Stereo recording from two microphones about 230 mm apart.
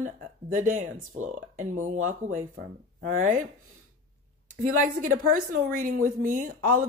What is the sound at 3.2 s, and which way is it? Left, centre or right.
Speech, right.